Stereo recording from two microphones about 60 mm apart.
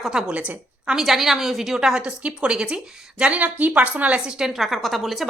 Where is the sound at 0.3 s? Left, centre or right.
Right.